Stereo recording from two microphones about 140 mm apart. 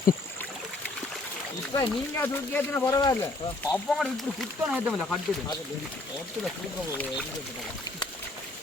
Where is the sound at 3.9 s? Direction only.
Centre (ahead or behind).